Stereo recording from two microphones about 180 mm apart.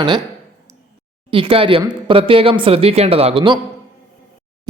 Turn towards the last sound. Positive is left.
turn(degrees=-30)  # may be behind; listen again after turning